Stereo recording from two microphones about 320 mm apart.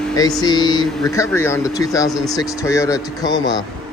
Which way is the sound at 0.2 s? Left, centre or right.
Centre.